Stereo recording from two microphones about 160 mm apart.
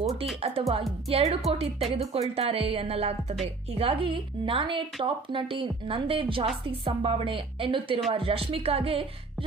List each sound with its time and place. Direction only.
0.4 s music: 35° right (ahead or behind)
1.1 s a woman's voice: 35° right (ahead or behind)